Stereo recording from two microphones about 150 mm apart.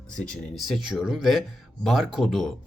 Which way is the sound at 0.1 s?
5° left (ahead or behind).